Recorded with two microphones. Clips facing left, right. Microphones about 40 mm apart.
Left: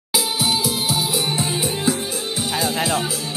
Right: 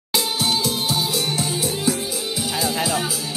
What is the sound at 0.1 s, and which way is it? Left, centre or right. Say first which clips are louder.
Music: left 1 dB; centre.